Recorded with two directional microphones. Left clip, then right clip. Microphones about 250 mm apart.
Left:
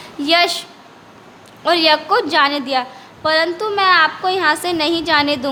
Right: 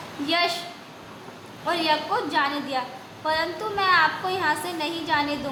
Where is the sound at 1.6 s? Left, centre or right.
Left.